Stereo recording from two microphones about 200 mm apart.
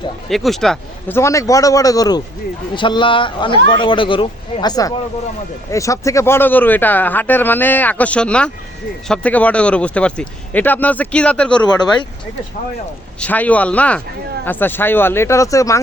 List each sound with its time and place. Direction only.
0.3 s speech: centre (ahead or behind)
11.6 s speech: 20° left (ahead or behind)
13.1 s speech: 5° left (ahead or behind)